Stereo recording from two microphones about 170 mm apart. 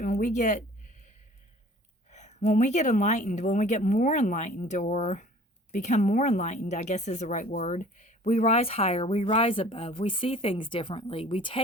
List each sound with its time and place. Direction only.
0.0 s speech: 50° left (ahead or behind)
2.0 s speech: 45° left (ahead or behind)